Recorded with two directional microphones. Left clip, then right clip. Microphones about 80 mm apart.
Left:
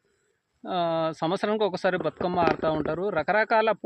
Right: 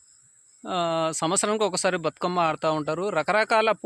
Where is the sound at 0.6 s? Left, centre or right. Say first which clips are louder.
Right 1 dB; right.